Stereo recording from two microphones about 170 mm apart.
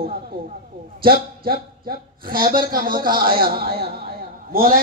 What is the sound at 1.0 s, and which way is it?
A woman's voice, 60° right (ahead or behind).